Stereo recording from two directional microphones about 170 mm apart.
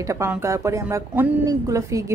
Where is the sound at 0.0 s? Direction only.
15° right (ahead or behind).